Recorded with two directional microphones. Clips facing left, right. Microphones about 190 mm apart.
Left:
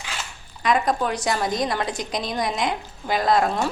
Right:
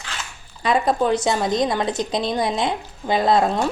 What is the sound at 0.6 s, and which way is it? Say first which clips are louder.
A woman's voice: right 3 dB; 30° right (ahead or behind).